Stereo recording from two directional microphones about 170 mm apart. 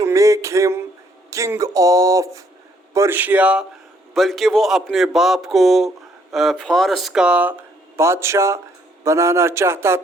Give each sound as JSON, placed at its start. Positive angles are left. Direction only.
{"t": 0.0, "sound": "music", "side_deg": -20}
{"t": 1.3, "sound": "a man's voice", "side_deg": -20}